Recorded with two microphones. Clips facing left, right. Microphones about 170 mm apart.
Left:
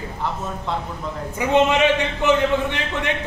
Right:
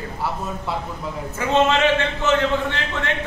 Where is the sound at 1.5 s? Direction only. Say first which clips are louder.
Left 1 dB; 15° left (ahead or behind).